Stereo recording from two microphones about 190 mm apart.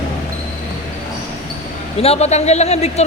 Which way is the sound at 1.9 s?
35° left (ahead or behind).